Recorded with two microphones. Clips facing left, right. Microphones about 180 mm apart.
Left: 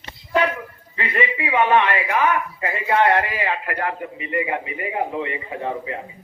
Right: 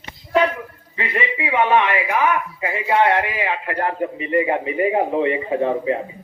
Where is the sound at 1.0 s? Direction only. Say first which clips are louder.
Even; 20° right (ahead or behind).